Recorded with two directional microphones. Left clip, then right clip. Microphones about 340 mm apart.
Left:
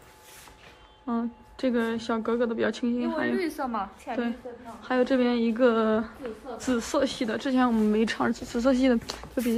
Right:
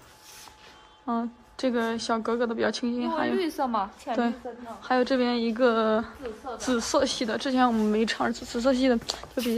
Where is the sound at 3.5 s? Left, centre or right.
Right.